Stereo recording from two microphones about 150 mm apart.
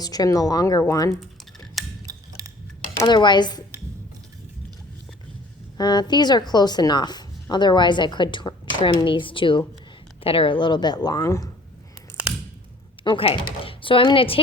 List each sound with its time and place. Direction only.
0.0 s speech: 25° left (ahead or behind)
2.0 s a sound: 25° right (ahead or behind)
3.0 s a woman's voice: 30° left (ahead or behind)
5.7 s a woman's voice: 30° left (ahead or behind)
13.1 s a woman's voice: 35° left (ahead or behind)